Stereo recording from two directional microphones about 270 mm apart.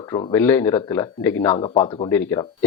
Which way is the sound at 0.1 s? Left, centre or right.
Centre.